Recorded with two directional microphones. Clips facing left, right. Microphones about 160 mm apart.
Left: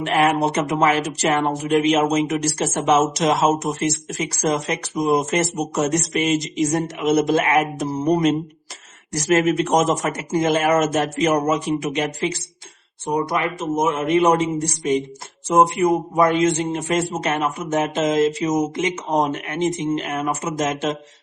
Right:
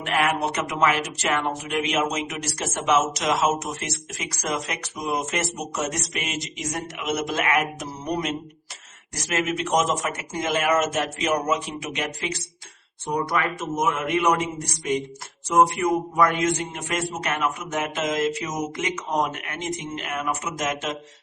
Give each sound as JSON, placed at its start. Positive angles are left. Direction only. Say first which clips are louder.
{"t": 0.0, "sound": "speech", "louder": "left 6 dB", "side_deg": 30}
{"t": 13.1, "sound": "speech", "louder": "left 3 dB", "side_deg": 20}